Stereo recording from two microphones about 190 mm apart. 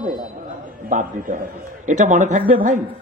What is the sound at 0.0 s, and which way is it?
A man's voice, 45° right (ahead or behind).